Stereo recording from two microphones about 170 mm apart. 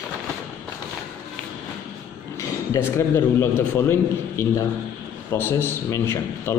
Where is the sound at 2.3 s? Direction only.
15° left (ahead or behind).